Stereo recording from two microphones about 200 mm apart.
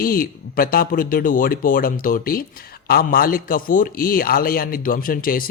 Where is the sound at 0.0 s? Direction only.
45° left (ahead or behind).